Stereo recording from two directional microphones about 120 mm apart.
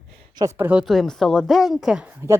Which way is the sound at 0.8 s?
Centre (ahead or behind).